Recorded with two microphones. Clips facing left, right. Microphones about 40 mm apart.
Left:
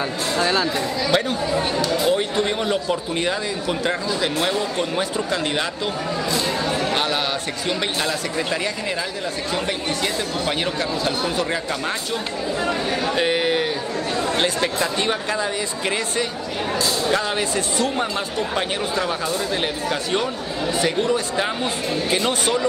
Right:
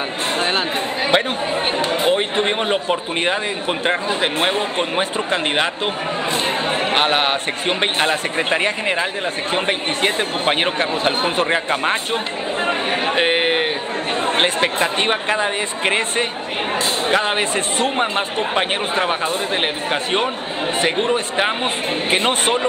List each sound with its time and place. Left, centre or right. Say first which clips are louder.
0.4 s speech: left 1 dB; right